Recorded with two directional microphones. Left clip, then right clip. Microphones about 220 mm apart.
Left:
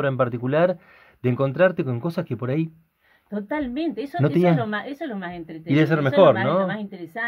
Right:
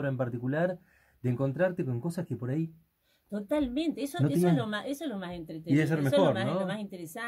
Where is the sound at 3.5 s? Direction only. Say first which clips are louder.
Left 3 dB; centre (ahead or behind).